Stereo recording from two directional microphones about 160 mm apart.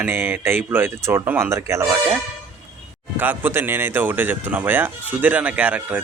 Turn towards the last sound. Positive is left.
turn(degrees=-10)  # may be behind; listen again after turning